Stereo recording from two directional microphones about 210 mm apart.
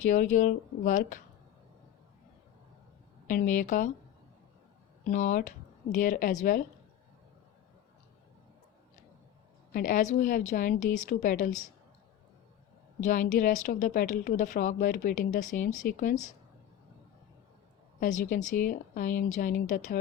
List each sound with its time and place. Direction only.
0.0 s a woman's voice: 40° left (ahead or behind)
3.2 s a woman's voice: 40° left (ahead or behind)
5.0 s a woman's voice: 35° left (ahead or behind)
9.7 s a woman's voice: 40° left (ahead or behind)
13.0 s a woman's voice: 40° left (ahead or behind)
18.0 s a woman's voice: 40° left (ahead or behind)